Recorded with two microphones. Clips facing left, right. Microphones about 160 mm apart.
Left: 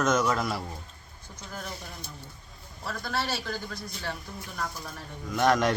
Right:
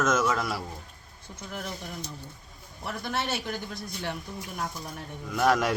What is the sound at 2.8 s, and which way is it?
A man's voice, 20° right (ahead or behind).